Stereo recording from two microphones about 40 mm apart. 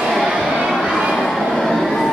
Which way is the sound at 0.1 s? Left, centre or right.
Centre.